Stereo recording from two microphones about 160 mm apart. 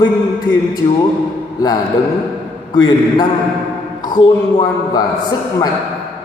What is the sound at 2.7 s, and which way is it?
Speech, 25° left (ahead or behind).